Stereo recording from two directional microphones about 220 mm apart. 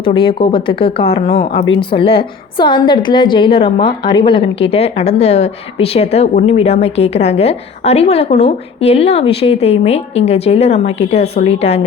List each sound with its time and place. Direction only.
0.0 s a woman's voice: 25° left (ahead or behind)